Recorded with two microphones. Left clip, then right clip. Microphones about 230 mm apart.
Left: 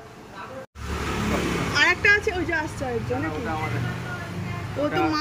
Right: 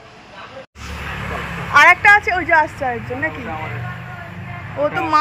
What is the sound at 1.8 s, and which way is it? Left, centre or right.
Speech, centre.